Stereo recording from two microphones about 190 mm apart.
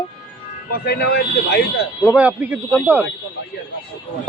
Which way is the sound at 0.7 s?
55° left (ahead or behind).